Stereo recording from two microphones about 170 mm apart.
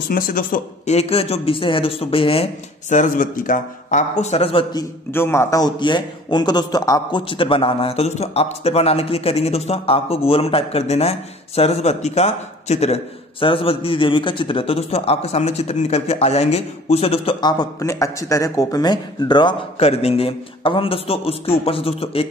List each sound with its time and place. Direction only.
0.1 s speech: 60° left (ahead or behind)
0.9 s a man's voice: 35° left (ahead or behind)
5.1 s a man's voice: 15° left (ahead or behind); by 22.3 s 35° left (ahead or behind)